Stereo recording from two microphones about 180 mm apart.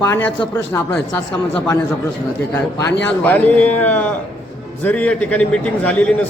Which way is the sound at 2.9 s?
75° left (ahead or behind).